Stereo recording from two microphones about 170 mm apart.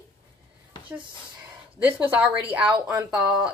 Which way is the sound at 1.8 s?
10° right (ahead or behind).